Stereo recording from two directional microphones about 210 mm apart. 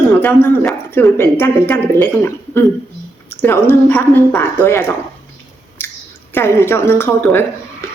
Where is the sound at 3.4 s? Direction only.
10° left (ahead or behind).